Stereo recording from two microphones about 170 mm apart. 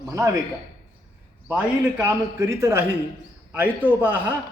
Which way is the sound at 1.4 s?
10° right (ahead or behind).